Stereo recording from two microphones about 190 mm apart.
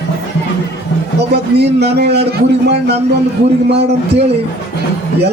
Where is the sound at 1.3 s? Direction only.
60° right (ahead or behind).